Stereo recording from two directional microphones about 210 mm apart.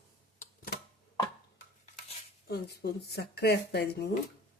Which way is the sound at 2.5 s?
50° left (ahead or behind).